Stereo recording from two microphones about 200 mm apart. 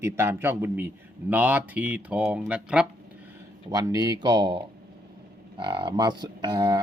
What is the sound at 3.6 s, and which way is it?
Speech, 15° right (ahead or behind).